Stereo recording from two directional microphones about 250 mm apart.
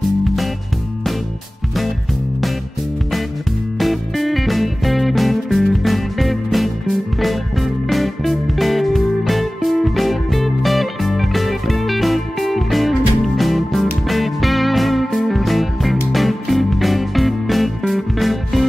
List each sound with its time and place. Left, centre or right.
3.7 s music: centre